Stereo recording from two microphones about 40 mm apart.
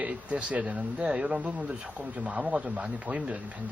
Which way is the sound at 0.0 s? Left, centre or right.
Right.